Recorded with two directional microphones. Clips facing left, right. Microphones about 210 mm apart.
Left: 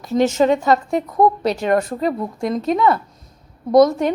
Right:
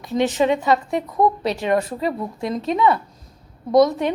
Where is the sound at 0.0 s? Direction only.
45° left (ahead or behind).